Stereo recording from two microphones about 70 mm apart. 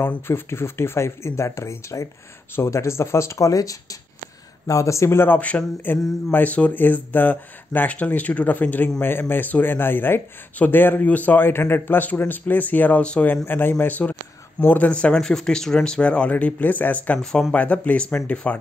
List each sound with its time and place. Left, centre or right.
0.3 s speech: left
5.4 s speech: centre
13.5 s speech: left
14.9 s a man's voice: centre
17.2 s a man's voice: centre
17.6 s speech: left